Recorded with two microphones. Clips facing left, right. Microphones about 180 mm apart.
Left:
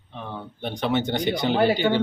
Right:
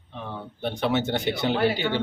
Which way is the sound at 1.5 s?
40° left (ahead or behind).